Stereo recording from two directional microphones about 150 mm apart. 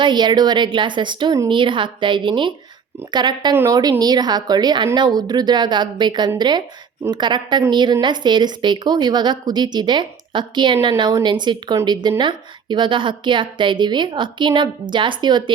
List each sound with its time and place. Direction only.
0.0 s a woman's voice: 30° right (ahead or behind)
3.5 s a woman's voice: 15° right (ahead or behind)
3.8 s a woman's voice: 25° right (ahead or behind)